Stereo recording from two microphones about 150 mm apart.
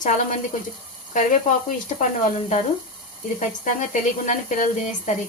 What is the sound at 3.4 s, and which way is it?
Speech, 55° left (ahead or behind).